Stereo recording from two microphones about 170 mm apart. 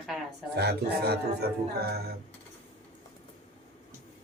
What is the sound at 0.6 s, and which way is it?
Speech, 75° right (ahead or behind).